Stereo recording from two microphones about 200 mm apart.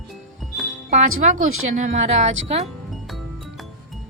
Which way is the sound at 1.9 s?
35° right (ahead or behind).